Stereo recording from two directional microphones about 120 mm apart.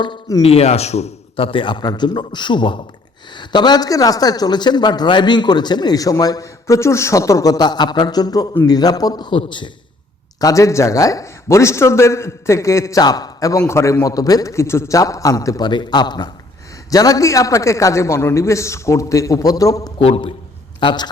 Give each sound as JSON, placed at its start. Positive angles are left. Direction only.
{"t": 0.4, "sound": "a man's voice", "side_deg": 60}
{"t": 10.4, "sound": "a man's voice", "side_deg": 25}
{"t": 20.0, "sound": "a man's voice", "side_deg": 50}
{"t": 20.7, "sound": "a man's voice", "side_deg": 40}